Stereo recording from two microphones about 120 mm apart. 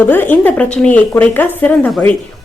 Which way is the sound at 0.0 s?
15° left (ahead or behind).